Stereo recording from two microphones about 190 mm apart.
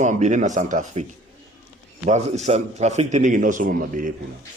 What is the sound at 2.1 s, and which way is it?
A man's voice, 35° right (ahead or behind).